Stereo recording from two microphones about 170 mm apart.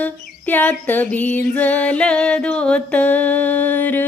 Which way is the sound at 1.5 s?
10° left (ahead or behind).